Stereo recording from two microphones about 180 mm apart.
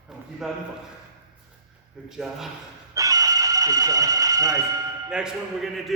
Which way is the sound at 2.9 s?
20° right (ahead or behind).